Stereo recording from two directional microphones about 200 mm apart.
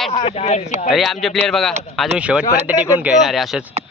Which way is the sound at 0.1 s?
30° left (ahead or behind).